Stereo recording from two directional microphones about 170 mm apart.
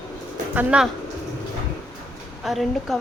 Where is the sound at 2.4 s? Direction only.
Centre (ahead or behind).